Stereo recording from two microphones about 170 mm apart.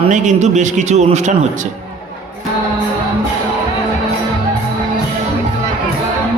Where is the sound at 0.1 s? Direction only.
45° right (ahead or behind).